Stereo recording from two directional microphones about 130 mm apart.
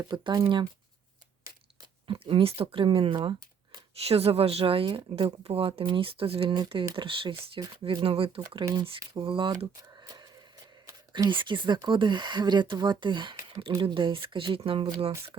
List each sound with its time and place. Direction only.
0.0 s speech: 30° right (ahead or behind)
2.0 s speech: 45° right (ahead or behind)
3.9 s speech: 50° right (ahead or behind)
8.6 s speech: 20° right (ahead or behind)
8.9 s speech: 45° right (ahead or behind)
10.0 s a sound: 30° right (ahead or behind)
11.1 s speech: 40° right (ahead or behind)